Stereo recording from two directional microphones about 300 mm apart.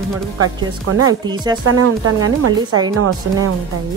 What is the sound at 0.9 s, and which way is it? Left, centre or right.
Speech, right.